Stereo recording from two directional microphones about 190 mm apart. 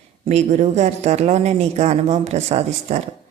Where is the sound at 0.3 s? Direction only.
35° right (ahead or behind).